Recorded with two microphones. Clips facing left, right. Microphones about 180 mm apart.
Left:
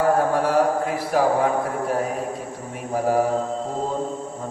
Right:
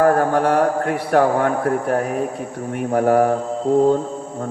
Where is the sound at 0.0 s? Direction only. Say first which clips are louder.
Right 4 dB; 65° right (ahead or behind).